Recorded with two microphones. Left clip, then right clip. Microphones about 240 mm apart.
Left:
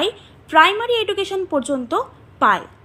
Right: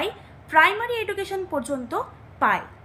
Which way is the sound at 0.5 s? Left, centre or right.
Centre.